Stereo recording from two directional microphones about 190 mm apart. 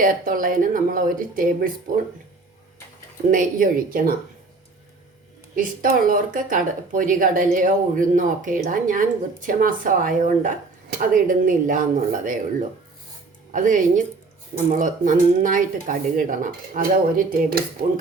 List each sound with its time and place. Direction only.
0.0 s speech: 45° right (ahead or behind)
3.2 s speech: 45° right (ahead or behind)
5.5 s speech: 45° right (ahead or behind)
13.5 s speech: 40° right (ahead or behind)